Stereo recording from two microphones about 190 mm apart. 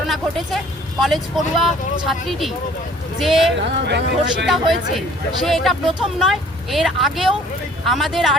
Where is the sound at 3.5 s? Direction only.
65° right (ahead or behind).